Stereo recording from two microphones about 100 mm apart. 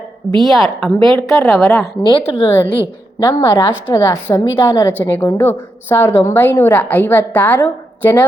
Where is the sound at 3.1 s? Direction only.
35° left (ahead or behind).